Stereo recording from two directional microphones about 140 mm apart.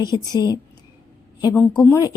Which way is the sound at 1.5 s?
10° left (ahead or behind).